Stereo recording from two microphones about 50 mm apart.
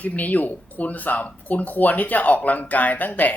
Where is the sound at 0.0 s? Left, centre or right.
Left.